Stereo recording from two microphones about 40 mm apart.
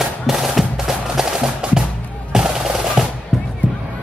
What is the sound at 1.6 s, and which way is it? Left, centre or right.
Music, right.